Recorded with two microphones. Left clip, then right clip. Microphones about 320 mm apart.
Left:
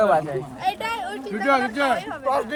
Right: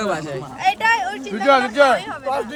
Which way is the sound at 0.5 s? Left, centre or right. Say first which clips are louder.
Right 10 dB; right.